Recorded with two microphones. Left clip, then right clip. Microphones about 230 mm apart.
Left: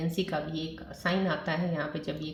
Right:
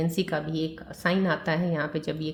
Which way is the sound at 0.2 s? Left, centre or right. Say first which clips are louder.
Right 1 dB; right.